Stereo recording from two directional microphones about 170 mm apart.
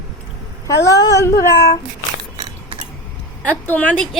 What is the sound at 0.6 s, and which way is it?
Speech, 20° left (ahead or behind).